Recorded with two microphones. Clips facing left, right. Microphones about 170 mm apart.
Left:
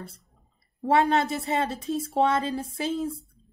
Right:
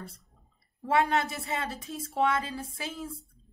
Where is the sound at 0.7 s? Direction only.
30° left (ahead or behind).